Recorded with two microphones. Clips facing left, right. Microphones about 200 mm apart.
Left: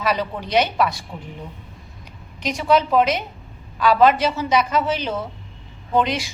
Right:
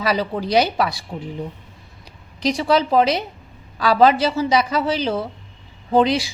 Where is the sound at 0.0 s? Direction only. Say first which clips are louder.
Right 2 dB; 35° right (ahead or behind).